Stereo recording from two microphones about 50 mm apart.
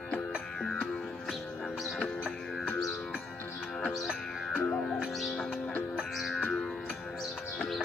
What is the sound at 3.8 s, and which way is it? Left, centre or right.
Music, centre.